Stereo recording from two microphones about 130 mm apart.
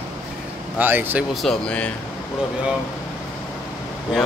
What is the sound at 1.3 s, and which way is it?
Speech, 5° left (ahead or behind).